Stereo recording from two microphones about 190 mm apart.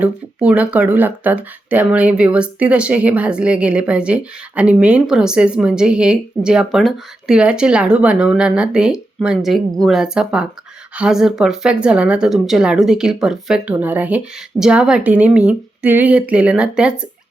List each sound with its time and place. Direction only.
0.0 s speech: 5° right (ahead or behind)